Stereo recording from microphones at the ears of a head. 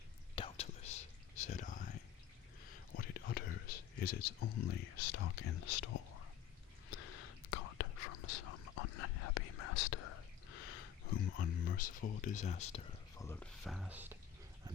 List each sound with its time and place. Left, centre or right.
0.3 s whispering: left
13.7 s speech: centre